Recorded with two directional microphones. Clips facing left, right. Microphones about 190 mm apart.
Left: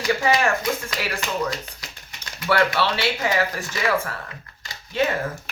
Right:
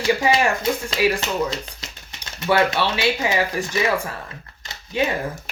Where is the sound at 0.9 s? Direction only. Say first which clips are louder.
Right 7 dB; 25° right (ahead or behind).